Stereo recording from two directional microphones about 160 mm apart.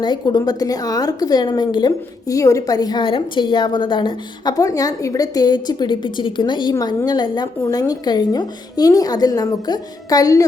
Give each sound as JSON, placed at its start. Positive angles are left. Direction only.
{"t": 0.0, "sound": "a woman's voice", "side_deg": 30}